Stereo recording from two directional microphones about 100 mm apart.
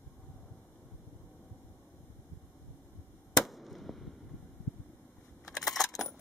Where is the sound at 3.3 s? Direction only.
Centre (ahead or behind).